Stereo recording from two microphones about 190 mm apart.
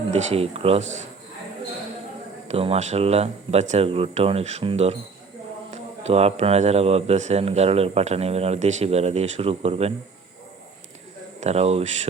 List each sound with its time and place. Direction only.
0.1 s speech: 35° right (ahead or behind)
2.5 s speech: 30° right (ahead or behind)
11.3 s speech: 35° right (ahead or behind)